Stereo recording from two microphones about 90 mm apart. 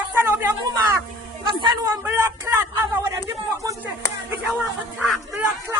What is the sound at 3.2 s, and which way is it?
Speech, 35° right (ahead or behind).